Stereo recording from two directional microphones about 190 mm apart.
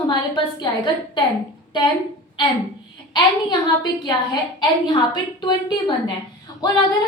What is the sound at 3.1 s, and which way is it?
A woman's voice, 25° left (ahead or behind).